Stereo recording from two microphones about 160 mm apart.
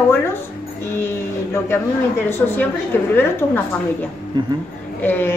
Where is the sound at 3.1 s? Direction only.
15° left (ahead or behind).